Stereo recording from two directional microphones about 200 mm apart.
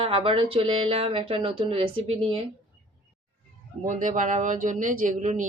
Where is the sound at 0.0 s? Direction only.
30° right (ahead or behind).